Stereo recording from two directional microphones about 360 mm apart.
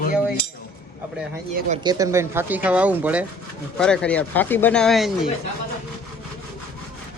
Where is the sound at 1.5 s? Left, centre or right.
Centre.